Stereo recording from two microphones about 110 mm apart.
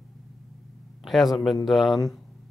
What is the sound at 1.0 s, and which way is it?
A man's voice, centre (ahead or behind).